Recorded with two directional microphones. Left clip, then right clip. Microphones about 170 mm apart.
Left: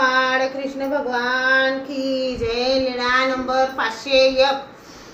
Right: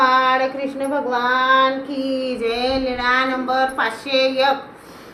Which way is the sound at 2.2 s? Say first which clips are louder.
Right 1 dB; 20° right (ahead or behind).